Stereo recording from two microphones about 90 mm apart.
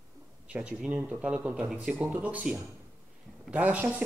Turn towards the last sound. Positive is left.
turn(degrees=-15)  # may be behind; listen again after turning